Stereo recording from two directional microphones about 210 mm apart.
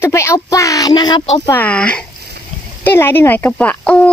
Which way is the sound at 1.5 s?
5° left (ahead or behind).